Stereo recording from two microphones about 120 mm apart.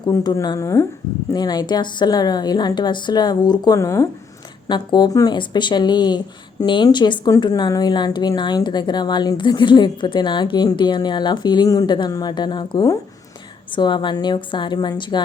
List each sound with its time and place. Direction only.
0.0 s speech: 35° left (ahead or behind)
1.3 s speech: 35° left (ahead or behind)
3.8 s speech: 25° left (ahead or behind)
4.7 s speech: 35° left (ahead or behind)